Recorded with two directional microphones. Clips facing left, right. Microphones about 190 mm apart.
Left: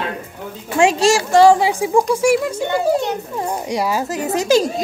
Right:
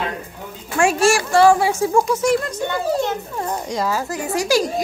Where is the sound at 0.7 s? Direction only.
20° left (ahead or behind).